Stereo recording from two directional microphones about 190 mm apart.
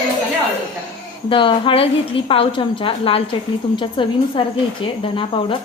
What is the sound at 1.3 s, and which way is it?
A woman's voice, 25° left (ahead or behind).